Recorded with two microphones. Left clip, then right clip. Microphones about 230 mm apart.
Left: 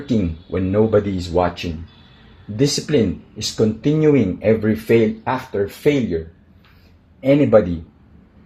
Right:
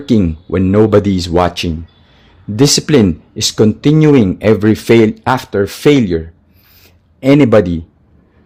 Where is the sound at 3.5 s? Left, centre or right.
Right.